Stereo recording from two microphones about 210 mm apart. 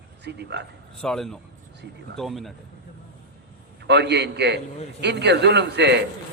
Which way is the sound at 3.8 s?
55° right (ahead or behind).